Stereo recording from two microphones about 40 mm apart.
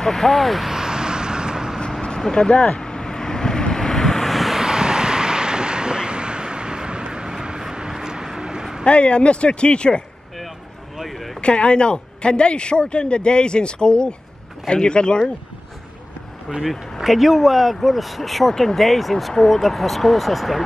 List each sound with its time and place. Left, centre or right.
0.0 s speech: centre
0.7 s vehicle: centre
1.9 s vehicle: centre
4.6 s vehicle: centre
8.8 s speech: left
11.0 s a sound: centre
11.4 s speech: left
17.0 s speech: centre